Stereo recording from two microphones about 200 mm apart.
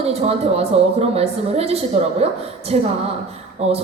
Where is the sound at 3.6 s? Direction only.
30° right (ahead or behind).